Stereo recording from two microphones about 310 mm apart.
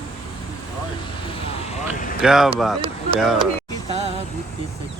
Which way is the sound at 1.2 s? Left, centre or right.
Centre.